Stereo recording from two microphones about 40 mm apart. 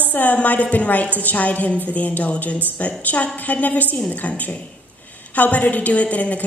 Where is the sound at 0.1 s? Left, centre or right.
Left.